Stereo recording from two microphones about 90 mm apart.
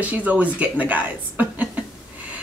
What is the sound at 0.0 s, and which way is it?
A woman's voice, 15° right (ahead or behind).